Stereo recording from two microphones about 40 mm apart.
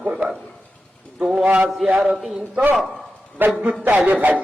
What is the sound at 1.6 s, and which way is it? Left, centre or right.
A man's voice, centre.